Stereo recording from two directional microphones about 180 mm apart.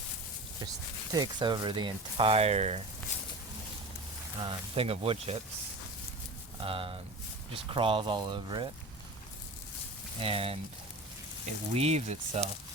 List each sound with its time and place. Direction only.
1.1 s speech: 25° right (ahead or behind)
3.1 s a sound: 40° left (ahead or behind)
4.4 s speech: 30° right (ahead or behind)
6.6 s speech: 30° right (ahead or behind)
10.2 s speech: 30° right (ahead or behind)
11.7 s speech: 35° right (ahead or behind)